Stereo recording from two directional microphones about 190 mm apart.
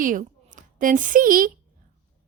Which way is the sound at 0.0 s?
45° right (ahead or behind).